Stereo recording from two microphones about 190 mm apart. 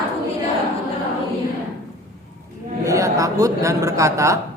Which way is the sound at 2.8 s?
15° right (ahead or behind).